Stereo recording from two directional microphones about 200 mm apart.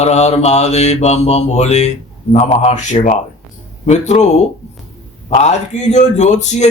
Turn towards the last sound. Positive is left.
turn(degrees=35)  # may be behind; listen again after turning